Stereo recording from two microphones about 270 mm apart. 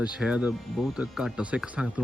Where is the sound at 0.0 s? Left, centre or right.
Centre.